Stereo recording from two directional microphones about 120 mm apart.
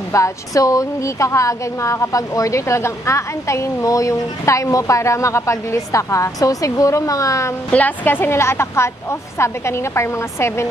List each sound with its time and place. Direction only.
0.1 s a woman's voice: 25° left (ahead or behind)
7.7 s a woman's voice: 15° left (ahead or behind)